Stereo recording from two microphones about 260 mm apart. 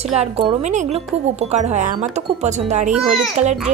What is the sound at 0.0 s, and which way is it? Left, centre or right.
A woman's voice, right.